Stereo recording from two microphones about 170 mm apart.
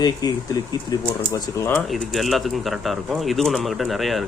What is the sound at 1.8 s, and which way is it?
Speech, centre (ahead or behind).